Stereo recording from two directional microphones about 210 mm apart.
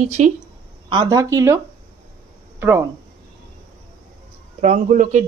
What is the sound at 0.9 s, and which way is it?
Speech, 20° right (ahead or behind).